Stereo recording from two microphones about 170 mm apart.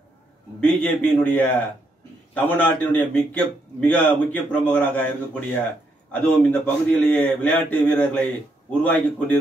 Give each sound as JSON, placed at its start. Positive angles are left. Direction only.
{"t": 0.6, "sound": "a man's voice", "side_deg": 10}